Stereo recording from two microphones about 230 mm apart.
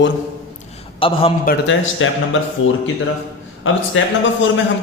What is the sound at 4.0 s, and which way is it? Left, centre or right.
Speech, left.